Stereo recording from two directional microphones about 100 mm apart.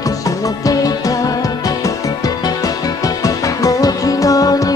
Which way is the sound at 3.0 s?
35° left (ahead or behind).